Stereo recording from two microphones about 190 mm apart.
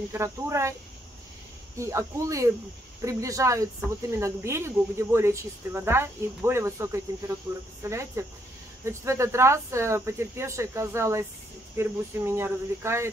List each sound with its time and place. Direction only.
0.1 s speech: 15° right (ahead or behind)
1.8 s speech: 15° right (ahead or behind)